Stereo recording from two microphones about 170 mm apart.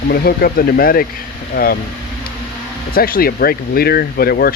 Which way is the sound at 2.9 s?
60° left (ahead or behind).